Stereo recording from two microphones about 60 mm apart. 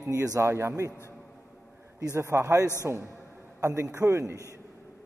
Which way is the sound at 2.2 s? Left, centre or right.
Right.